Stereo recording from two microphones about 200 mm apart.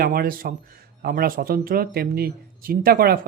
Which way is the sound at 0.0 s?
50° right (ahead or behind).